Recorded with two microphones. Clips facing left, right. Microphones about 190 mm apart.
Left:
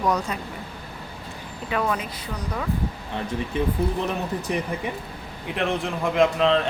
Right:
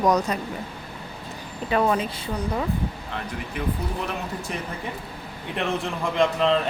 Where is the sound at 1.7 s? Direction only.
30° right (ahead or behind).